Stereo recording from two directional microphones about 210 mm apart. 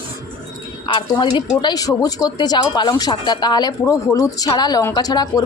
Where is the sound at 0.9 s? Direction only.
20° left (ahead or behind).